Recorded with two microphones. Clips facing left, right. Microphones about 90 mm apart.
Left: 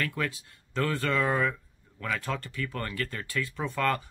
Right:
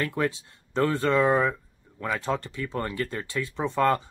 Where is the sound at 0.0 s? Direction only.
25° right (ahead or behind).